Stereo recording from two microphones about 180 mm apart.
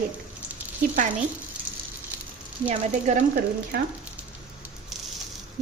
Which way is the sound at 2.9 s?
40° right (ahead or behind).